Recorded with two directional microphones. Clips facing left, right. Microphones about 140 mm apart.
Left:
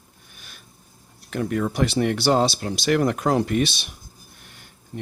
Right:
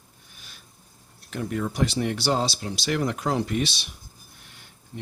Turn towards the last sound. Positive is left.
turn(degrees=55)  # may be behind; listen again after turning